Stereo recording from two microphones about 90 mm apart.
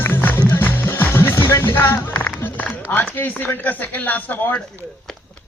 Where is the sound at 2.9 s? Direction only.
25° left (ahead or behind).